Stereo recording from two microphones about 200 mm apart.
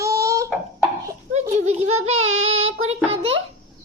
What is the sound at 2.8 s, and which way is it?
Speech, 30° right (ahead or behind).